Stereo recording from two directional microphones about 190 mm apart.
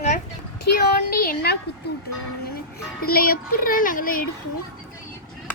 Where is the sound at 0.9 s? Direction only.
50° left (ahead or behind).